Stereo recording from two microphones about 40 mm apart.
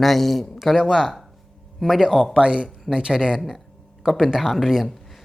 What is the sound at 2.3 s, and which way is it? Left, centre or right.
Speech, right.